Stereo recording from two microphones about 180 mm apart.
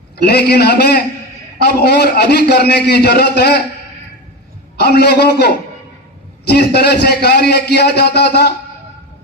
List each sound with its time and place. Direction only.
0.3 s a man's voice: 65° left (ahead or behind)
4.9 s a man's voice: 65° left (ahead or behind)
6.5 s a man's voice: 65° left (ahead or behind)